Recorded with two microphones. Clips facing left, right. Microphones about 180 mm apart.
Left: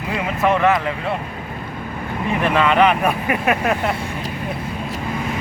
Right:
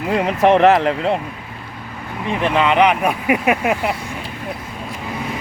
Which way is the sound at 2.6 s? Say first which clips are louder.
Right 1 dB; 20° right (ahead or behind).